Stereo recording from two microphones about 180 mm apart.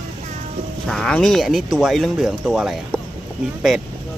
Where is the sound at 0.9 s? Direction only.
5° left (ahead or behind).